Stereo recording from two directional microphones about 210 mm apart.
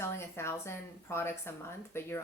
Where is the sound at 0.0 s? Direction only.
10° left (ahead or behind).